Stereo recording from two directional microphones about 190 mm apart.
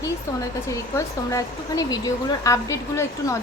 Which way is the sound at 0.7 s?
15° left (ahead or behind).